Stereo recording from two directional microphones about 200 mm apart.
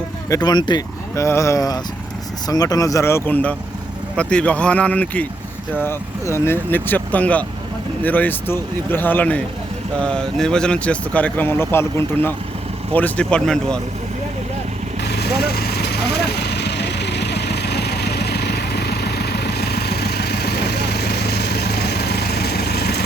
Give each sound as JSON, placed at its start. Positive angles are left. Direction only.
{"t": 0.3, "sound": "speech", "side_deg": 20}
{"t": 15.0, "sound": "vehicle", "side_deg": 55}